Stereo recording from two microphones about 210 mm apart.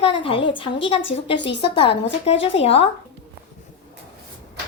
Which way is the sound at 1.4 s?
55° left (ahead or behind).